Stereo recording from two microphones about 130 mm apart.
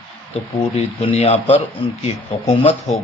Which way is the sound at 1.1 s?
55° left (ahead or behind).